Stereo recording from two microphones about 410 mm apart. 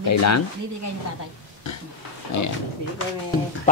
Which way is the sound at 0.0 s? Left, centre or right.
Left.